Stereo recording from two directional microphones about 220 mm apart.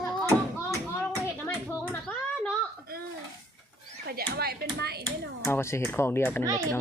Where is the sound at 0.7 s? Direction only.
10° left (ahead or behind).